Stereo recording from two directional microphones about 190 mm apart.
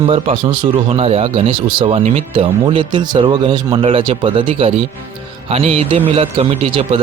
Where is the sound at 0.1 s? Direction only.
25° right (ahead or behind).